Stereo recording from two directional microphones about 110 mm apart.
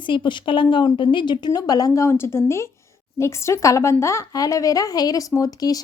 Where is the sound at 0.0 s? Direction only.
45° left (ahead or behind).